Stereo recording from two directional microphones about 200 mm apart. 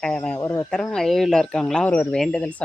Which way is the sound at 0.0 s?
5° left (ahead or behind).